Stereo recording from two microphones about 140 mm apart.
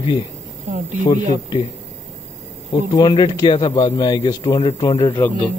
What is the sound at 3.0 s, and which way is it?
A man's voice, 30° left (ahead or behind).